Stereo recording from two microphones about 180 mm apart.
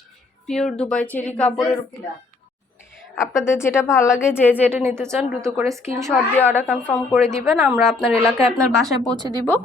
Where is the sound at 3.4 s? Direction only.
15° left (ahead or behind).